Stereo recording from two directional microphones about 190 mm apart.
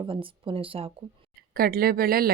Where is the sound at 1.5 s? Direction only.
50° right (ahead or behind).